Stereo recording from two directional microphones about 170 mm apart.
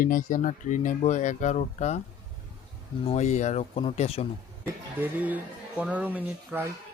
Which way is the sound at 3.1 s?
40° left (ahead or behind).